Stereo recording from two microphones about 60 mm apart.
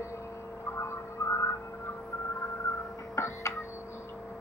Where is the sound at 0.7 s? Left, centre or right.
Left.